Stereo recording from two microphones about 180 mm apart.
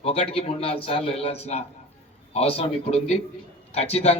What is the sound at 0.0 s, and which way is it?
A man's voice, 35° left (ahead or behind).